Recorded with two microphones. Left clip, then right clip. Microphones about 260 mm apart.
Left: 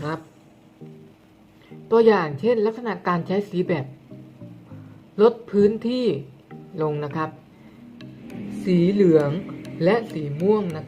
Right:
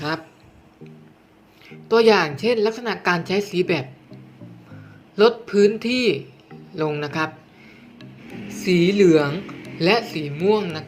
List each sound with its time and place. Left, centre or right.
1.9 s a woman's voice: centre
5.1 s a woman's voice: centre
8.6 s a woman's voice: centre